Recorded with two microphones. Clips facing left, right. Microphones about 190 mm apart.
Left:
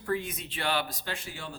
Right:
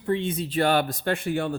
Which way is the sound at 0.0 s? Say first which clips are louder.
Right 6 dB; 25° right (ahead or behind).